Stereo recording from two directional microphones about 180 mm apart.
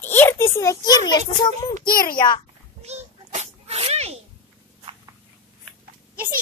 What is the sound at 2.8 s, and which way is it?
Sneeze, 40° right (ahead or behind).